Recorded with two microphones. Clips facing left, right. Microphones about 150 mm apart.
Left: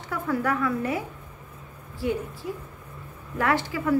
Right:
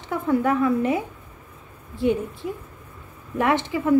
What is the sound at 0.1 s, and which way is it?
A woman's voice, 20° right (ahead or behind).